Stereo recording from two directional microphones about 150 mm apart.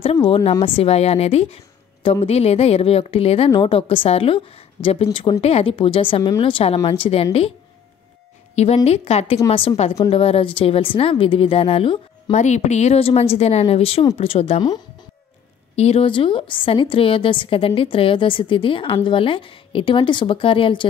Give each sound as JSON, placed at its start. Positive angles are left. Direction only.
{"t": 0.0, "sound": "a woman's voice", "side_deg": 40}
{"t": 8.5, "sound": "a woman's voice", "side_deg": 45}
{"t": 12.3, "sound": "a woman's voice", "side_deg": 50}
{"t": 15.7, "sound": "a woman's voice", "side_deg": 45}